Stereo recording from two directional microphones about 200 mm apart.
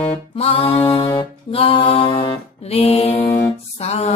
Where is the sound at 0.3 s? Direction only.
30° left (ahead or behind).